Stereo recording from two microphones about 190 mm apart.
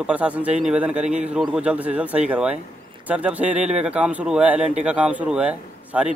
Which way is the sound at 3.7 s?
35° right (ahead or behind).